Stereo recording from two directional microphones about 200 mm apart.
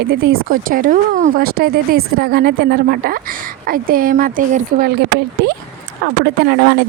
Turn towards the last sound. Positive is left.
turn(degrees=-55)  # may be behind; listen again after turning